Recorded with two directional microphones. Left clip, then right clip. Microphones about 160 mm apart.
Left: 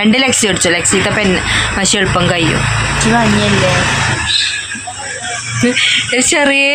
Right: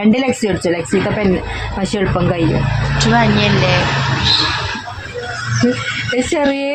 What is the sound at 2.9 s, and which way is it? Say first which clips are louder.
Speech: even; 65° left (ahead or behind).